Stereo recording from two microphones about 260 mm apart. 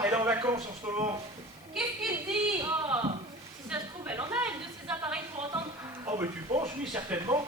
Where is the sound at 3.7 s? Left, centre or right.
Centre.